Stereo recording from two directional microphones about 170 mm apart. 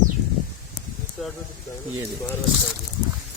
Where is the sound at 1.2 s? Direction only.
5° right (ahead or behind).